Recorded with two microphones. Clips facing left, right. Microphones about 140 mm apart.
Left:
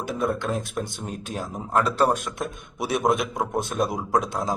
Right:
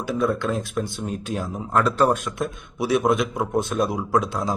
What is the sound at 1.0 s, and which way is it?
Speech, 45° left (ahead or behind).